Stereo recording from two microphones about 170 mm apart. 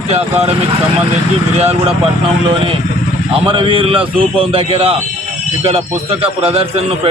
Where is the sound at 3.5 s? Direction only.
30° right (ahead or behind).